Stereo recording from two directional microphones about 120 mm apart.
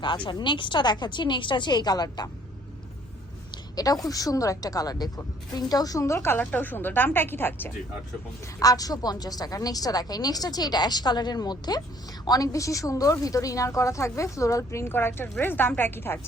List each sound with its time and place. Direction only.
0.0 s a woman's voice: 40° left (ahead or behind)
3.5 s a woman's voice: 30° left (ahead or behind)
8.5 s a woman's voice: 30° left (ahead or behind)